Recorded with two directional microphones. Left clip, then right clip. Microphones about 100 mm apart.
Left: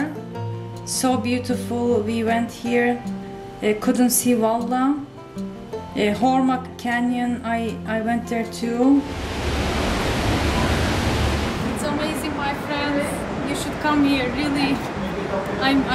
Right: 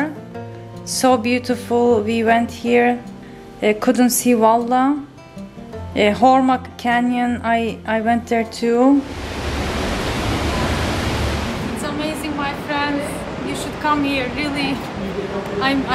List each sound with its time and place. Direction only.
1.0 s speech: 20° right (ahead or behind)
5.9 s speech: 20° right (ahead or behind)
9.3 s waves: 20° right (ahead or behind)
11.1 s a sound: 20° right (ahead or behind)
11.8 s a sound: centre (ahead or behind)
15.6 s speech: centre (ahead or behind)